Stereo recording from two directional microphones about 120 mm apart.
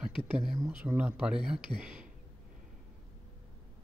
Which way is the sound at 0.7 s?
15° right (ahead or behind).